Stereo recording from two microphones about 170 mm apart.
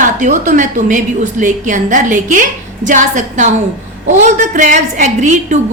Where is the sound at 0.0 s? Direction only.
50° right (ahead or behind).